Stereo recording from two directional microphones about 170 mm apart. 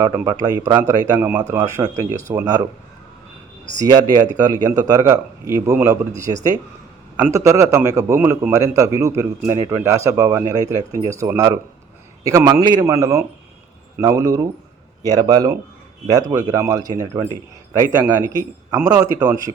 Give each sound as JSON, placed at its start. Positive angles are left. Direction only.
{"t": 0.2, "sound": "a man's voice", "side_deg": -20}
{"t": 3.8, "sound": "a man's voice", "side_deg": -20}